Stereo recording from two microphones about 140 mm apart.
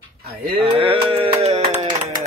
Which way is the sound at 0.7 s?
40° right (ahead or behind).